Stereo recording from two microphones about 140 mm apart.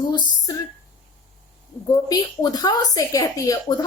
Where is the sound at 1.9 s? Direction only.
25° left (ahead or behind).